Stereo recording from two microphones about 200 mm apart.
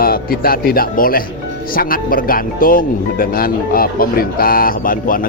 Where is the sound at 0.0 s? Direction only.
45° left (ahead or behind).